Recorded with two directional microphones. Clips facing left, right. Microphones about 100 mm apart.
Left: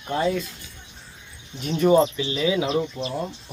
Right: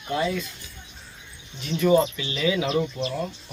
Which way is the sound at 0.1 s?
40° left (ahead or behind).